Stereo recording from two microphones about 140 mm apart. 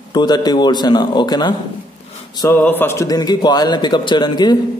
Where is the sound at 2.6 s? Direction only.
15° left (ahead or behind); by 4.6 s 30° left (ahead or behind).